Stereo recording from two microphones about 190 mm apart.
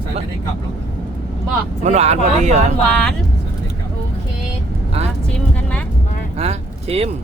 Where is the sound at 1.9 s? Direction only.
35° right (ahead or behind).